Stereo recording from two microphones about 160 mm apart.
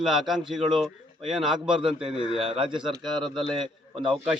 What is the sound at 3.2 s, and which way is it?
A man's voice, centre (ahead or behind).